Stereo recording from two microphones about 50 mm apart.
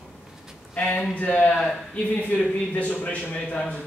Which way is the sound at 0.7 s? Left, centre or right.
Left.